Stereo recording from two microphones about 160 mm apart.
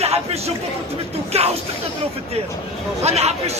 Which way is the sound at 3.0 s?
40° right (ahead or behind).